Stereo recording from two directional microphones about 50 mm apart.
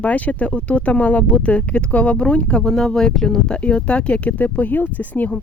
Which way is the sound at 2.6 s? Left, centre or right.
Centre.